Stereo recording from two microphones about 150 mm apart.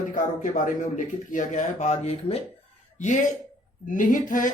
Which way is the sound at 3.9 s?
60° left (ahead or behind).